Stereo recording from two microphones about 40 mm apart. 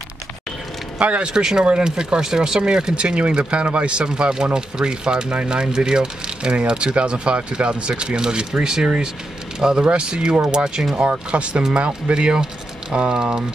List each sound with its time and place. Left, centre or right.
0.9 s speech: right
1.3 s speech: centre
11.1 s speech: right